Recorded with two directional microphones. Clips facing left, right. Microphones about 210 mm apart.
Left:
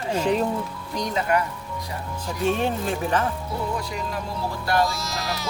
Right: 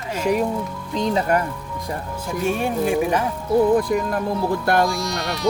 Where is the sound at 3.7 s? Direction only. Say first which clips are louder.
Right 10 dB; 50° right (ahead or behind).